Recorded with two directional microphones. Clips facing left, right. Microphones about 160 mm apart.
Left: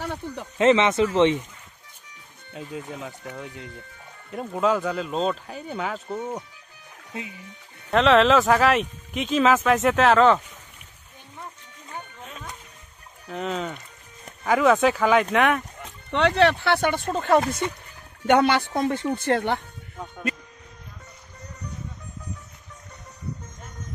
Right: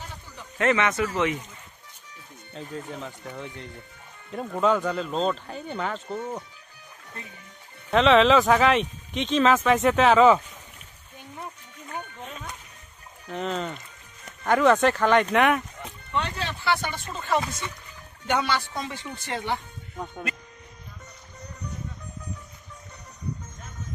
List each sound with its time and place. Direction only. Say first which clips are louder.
0.0 s a sound: left 11 dB; 65° left (ahead or behind)
0.6 s speech: left 5 dB; 20° left (ahead or behind)
2.5 s speech: left 1 dB; 10° left (ahead or behind)
7.9 s speech: even; centre (ahead or behind)
12.2 s music: right 2 dB; centre (ahead or behind)
13.3 s speech: left 1 dB; centre (ahead or behind)
16.1 s speech: left 11 dB; 85° left; by 19.6 s 60° left (ahead or behind)